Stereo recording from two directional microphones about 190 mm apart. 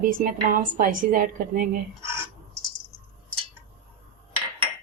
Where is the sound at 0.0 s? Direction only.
45° right (ahead or behind).